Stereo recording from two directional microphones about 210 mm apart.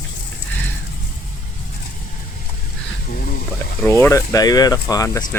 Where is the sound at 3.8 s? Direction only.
10° left (ahead or behind).